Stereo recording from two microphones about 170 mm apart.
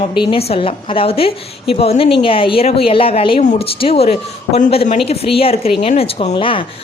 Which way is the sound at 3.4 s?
45° left (ahead or behind).